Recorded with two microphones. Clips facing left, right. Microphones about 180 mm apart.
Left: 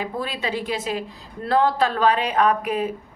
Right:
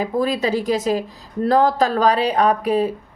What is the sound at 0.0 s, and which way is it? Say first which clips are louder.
A woman's voice: right 8 dB; 40° right (ahead or behind).